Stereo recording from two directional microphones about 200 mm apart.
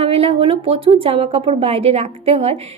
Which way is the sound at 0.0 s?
30° right (ahead or behind).